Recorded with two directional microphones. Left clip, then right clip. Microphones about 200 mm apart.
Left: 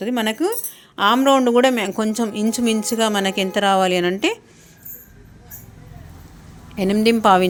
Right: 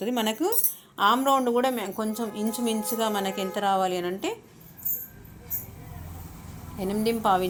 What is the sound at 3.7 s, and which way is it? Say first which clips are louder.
Speech: left 7 dB; 90° left.